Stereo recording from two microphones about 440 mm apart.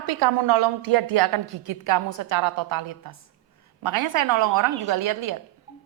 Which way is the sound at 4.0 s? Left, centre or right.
Right.